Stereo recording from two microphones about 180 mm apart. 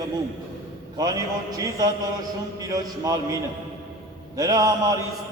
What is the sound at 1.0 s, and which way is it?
A man's voice, 20° right (ahead or behind).